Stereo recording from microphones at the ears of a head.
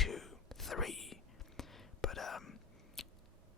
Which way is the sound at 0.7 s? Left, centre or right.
Left.